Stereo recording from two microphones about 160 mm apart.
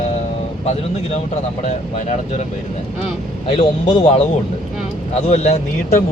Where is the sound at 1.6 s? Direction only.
45° left (ahead or behind).